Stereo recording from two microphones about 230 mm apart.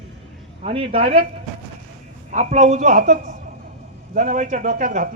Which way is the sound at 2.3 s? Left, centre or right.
Right.